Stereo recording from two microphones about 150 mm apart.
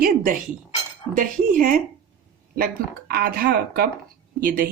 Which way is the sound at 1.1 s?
70° right (ahead or behind).